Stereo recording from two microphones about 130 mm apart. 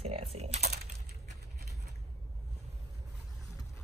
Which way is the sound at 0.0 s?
55° right (ahead or behind).